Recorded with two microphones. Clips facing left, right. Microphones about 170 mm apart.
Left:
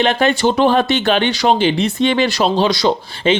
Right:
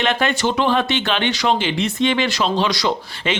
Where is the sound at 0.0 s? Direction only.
35° left (ahead or behind).